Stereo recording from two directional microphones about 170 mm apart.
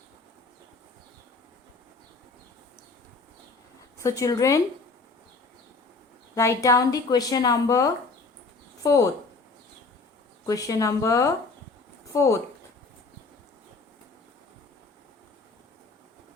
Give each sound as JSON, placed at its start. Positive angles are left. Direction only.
{"t": 3.9, "sound": "speech", "side_deg": 20}
{"t": 6.3, "sound": "speech", "side_deg": 15}
{"t": 10.4, "sound": "speech", "side_deg": 20}